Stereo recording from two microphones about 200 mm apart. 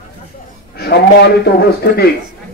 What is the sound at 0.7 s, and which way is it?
Speech, 50° left (ahead or behind).